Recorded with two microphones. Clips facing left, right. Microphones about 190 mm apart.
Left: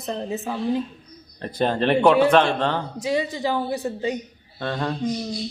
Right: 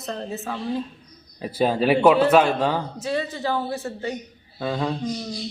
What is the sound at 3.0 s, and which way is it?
Speech, 15° left (ahead or behind).